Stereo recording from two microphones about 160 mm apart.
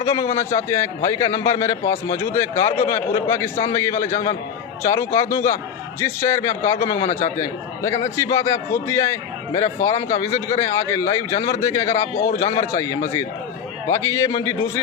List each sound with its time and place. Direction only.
0.0 s a man's voice: 20° left (ahead or behind)
12.1 s a man's voice: 40° left (ahead or behind)
12.5 s a man's voice: 20° left (ahead or behind)